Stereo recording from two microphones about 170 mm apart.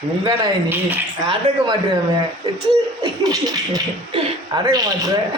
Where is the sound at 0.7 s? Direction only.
10° right (ahead or behind).